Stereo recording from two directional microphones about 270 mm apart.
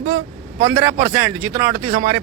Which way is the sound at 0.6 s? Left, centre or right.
Centre.